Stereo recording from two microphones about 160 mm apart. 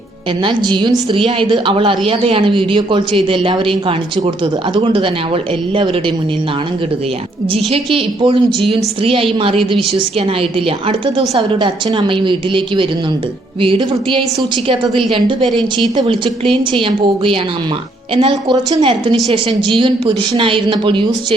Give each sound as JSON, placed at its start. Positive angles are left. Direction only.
{"t": 0.4, "sound": "a woman's voice", "side_deg": -30}
{"t": 8.2, "sound": "a woman's voice", "side_deg": -30}
{"t": 11.6, "sound": "speech", "side_deg": -30}
{"t": 15.4, "sound": "speech", "side_deg": 0}
{"t": 16.0, "sound": "a woman's voice", "side_deg": -30}